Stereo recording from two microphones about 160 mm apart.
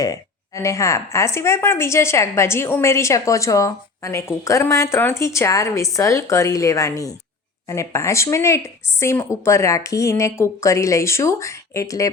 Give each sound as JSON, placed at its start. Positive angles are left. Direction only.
{"t": 0.0, "sound": "a woman's voice", "side_deg": 20}